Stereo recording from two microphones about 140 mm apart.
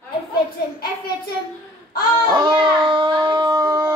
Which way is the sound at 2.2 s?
30° right (ahead or behind).